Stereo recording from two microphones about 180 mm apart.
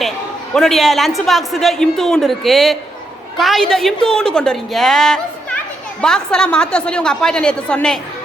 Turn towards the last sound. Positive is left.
turn(degrees=5)  # may be behind; listen again after turning